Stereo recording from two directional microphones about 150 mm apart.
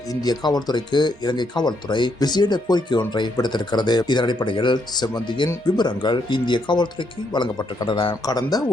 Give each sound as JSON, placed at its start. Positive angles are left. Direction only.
{"t": 0.1, "sound": "speech", "side_deg": 25}